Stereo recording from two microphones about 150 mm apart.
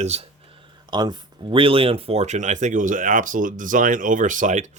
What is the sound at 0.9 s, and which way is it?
Speech, 30° right (ahead or behind).